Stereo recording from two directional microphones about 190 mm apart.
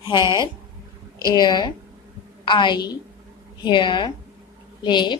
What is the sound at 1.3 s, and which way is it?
A woman's voice, 20° left (ahead or behind).